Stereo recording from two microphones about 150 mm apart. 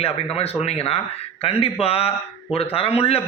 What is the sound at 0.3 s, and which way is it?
A man's voice, 45° left (ahead or behind).